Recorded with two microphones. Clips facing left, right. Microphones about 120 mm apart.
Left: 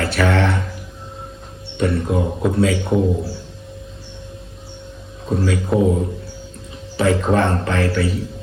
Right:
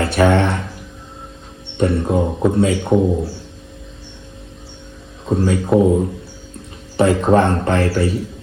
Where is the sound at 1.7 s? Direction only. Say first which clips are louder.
Right 3 dB; 30° right (ahead or behind).